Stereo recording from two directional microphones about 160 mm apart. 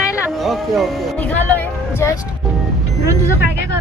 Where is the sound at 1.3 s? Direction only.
10° left (ahead or behind).